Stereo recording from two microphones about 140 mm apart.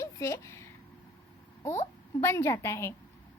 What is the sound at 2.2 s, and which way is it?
Speech, 20° left (ahead or behind).